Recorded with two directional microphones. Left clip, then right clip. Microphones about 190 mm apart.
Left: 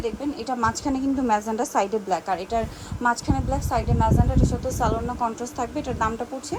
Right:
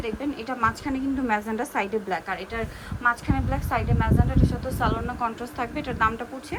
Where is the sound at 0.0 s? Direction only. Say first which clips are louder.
Left 2 dB; 15° left (ahead or behind).